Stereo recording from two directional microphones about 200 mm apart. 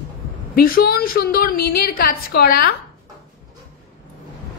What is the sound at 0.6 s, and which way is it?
A woman's voice, 45° left (ahead or behind).